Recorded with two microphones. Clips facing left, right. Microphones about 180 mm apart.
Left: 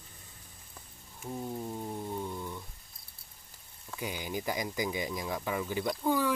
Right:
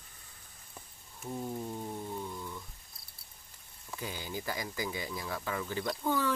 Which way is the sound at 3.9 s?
15° left (ahead or behind).